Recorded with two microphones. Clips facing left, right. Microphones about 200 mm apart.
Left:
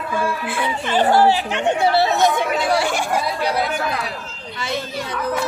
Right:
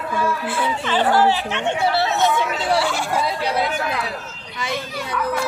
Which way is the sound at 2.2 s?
45° left (ahead or behind).